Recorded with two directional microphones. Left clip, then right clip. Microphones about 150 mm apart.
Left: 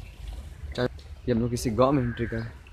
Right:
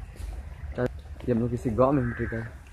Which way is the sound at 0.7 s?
20° left (ahead or behind).